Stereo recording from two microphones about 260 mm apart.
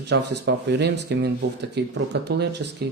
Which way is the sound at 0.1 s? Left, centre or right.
Right.